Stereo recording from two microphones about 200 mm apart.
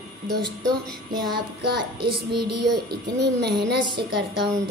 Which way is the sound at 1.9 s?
25° right (ahead or behind).